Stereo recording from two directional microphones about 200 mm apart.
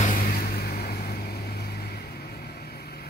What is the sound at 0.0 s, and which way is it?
Vehicle, 45° left (ahead or behind).